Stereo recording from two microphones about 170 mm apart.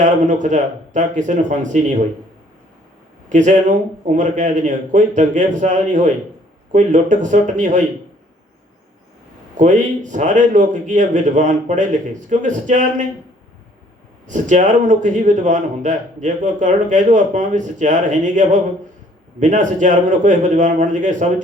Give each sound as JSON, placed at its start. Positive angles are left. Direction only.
{"t": 0.0, "sound": "a man's voice", "side_deg": -45}
{"t": 3.2, "sound": "a man's voice", "side_deg": -45}
{"t": 9.6, "sound": "a man's voice", "side_deg": -45}
{"t": 14.3, "sound": "a man's voice", "side_deg": -45}